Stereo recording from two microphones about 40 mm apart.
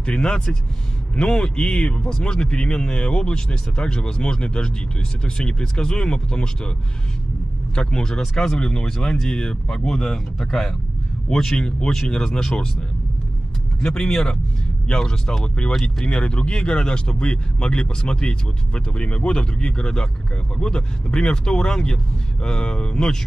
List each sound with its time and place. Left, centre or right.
0.0 s speech: left
2.0 s speech: centre
2.2 s speech: left
7.7 s speech: centre
13.7 s speech: centre